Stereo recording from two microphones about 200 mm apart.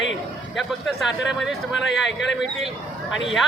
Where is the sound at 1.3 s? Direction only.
Centre (ahead or behind).